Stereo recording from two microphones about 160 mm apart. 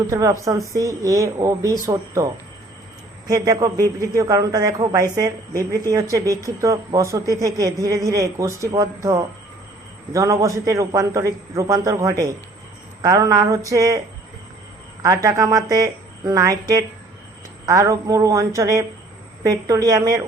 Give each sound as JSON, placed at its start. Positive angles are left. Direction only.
{"t": 0.1, "sound": "a woman's voice", "side_deg": -20}
{"t": 3.2, "sound": "a woman's voice", "side_deg": -20}
{"t": 15.0, "sound": "a woman's voice", "side_deg": -20}